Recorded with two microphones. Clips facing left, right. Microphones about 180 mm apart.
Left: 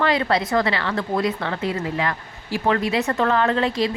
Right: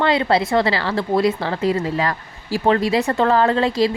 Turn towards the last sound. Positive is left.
turn(degrees=-35)  # may be behind; listen again after turning